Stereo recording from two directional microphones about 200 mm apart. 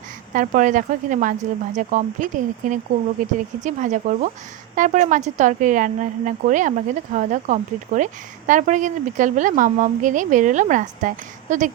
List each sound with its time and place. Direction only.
0.3 s speech: 40° right (ahead or behind)